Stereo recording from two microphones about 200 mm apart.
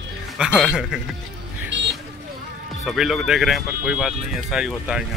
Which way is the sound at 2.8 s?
Centre (ahead or behind).